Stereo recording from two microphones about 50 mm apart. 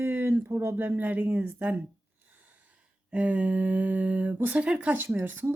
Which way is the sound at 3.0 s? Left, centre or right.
Right.